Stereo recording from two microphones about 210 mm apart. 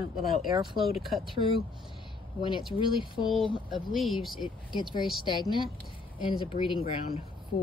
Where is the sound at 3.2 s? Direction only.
Centre (ahead or behind).